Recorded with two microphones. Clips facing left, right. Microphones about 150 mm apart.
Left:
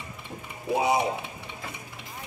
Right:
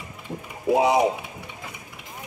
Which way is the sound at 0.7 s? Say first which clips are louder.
Right 5 dB; 90° right.